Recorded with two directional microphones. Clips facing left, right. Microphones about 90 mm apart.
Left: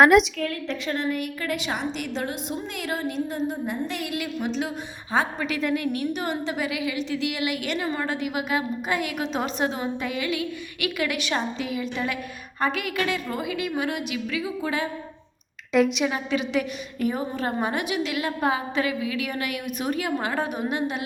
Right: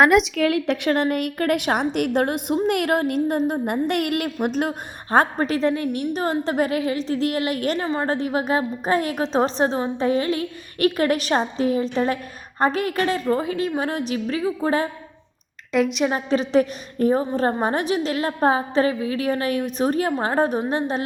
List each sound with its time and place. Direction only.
0.0 s a woman's voice: centre (ahead or behind)
0.3 s a woman's voice: 90° right; by 5.5 s 55° right (ahead or behind)
5.5 s a woman's voice: 30° right (ahead or behind)
15.7 s a woman's voice: centre (ahead or behind)
16.0 s a woman's voice: 35° right (ahead or behind)